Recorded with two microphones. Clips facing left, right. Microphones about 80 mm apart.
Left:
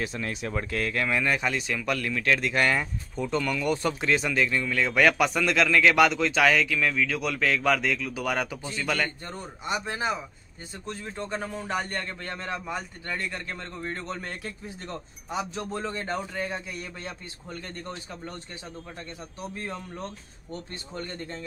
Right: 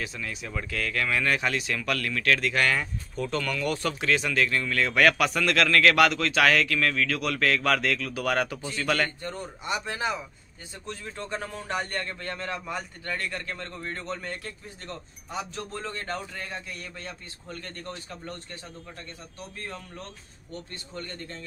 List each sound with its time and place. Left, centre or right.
0.0 s speech: left; by 9.1 s centre
9.2 s speech: left
14.0 s speech: centre